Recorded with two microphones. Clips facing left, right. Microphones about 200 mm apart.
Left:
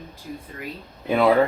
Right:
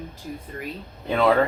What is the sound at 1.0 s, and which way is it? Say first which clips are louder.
Speech: left 2 dB; 10° left (ahead or behind).